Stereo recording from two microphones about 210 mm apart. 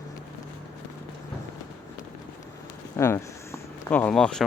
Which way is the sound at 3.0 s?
10° left (ahead or behind).